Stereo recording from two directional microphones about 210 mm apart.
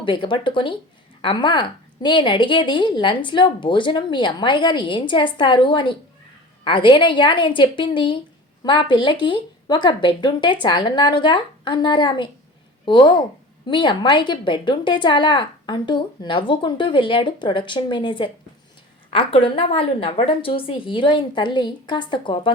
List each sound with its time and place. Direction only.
0.0 s a woman's voice: 25° left (ahead or behind)